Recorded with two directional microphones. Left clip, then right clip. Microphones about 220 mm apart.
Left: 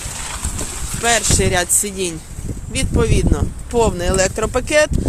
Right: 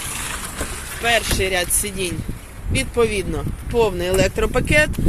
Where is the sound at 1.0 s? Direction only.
25° left (ahead or behind).